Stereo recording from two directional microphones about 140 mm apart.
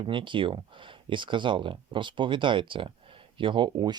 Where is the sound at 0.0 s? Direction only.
35° right (ahead or behind).